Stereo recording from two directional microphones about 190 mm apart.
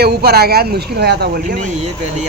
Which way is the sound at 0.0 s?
55° right (ahead or behind).